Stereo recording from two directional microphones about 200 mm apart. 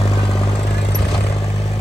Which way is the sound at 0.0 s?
25° left (ahead or behind).